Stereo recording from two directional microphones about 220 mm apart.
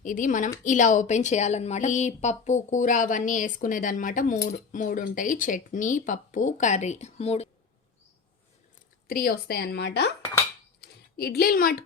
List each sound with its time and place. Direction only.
0.0 s speech: 35° left (ahead or behind)
9.0 s a woman's voice: 40° left (ahead or behind)
10.8 s a sound: 45° left (ahead or behind)